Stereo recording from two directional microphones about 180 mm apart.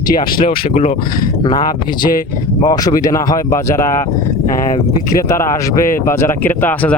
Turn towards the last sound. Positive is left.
turn(degrees=10)  # may be behind; listen again after turning